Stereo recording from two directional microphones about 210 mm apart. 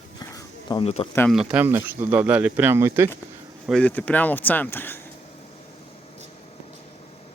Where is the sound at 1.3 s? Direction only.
5° right (ahead or behind).